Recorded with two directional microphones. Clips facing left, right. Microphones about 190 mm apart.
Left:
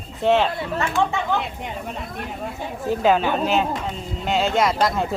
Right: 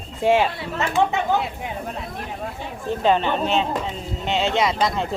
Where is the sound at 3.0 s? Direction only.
5° left (ahead or behind).